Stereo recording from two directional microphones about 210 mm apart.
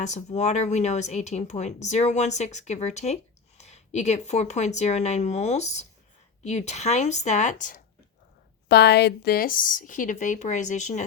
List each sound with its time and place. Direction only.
0.0 s speech: 35° left (ahead or behind)
8.7 s speech: 50° left (ahead or behind); by 11.0 s 35° left (ahead or behind)